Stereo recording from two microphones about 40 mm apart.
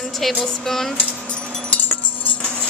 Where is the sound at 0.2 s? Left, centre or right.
Centre.